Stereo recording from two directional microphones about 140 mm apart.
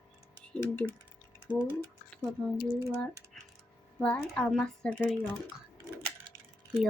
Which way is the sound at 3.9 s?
10° left (ahead or behind).